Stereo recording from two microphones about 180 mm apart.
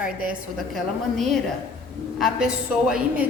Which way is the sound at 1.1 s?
Centre (ahead or behind).